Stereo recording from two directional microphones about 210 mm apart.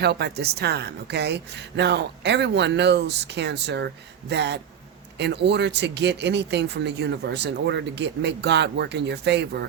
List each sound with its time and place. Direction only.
0.0 s speech: 50° right (ahead or behind)